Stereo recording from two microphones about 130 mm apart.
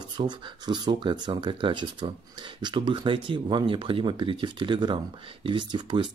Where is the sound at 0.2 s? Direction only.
35° right (ahead or behind).